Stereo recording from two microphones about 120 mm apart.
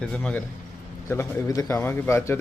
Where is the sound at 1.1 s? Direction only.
25° left (ahead or behind).